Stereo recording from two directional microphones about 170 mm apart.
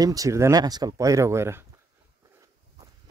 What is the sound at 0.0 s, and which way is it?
Speech, 20° right (ahead or behind).